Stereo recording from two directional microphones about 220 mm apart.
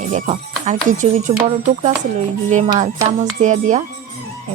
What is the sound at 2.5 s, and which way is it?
Speech, 30° right (ahead or behind).